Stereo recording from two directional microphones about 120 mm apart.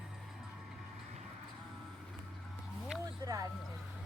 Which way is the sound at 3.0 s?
30° right (ahead or behind).